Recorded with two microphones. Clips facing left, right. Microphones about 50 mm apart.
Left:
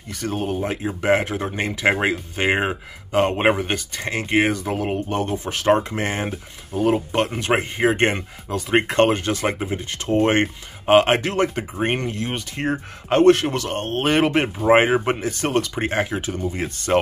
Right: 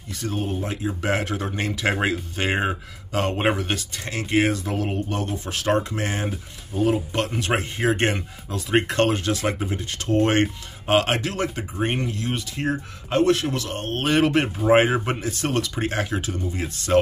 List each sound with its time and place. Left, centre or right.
0.3 s speech: left
1.1 s speech: centre
4.6 s speech: centre
5.1 s speech: left
9.6 s speech: centre
14.7 s speech: centre; by 17.0 s left